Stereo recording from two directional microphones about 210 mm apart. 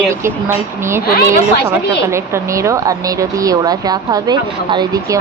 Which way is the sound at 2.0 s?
15° right (ahead or behind).